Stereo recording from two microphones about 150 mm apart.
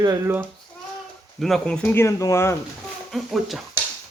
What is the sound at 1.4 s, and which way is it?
Speech, 5° left (ahead or behind).